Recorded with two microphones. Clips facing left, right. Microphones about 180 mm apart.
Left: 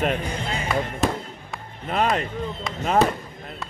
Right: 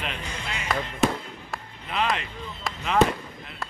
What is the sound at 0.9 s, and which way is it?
Basketball bounce, centre (ahead or behind).